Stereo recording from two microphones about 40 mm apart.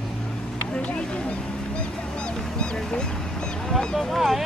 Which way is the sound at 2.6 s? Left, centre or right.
Centre.